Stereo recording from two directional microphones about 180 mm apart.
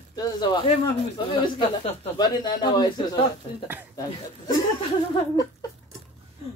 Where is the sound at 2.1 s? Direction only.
20° left (ahead or behind).